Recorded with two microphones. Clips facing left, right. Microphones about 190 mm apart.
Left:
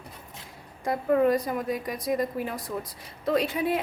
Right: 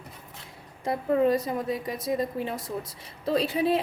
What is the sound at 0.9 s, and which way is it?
A woman's voice, 25° right (ahead or behind).